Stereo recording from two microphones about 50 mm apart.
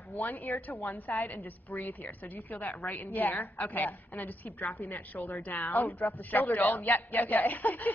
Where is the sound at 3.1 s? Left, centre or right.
Left.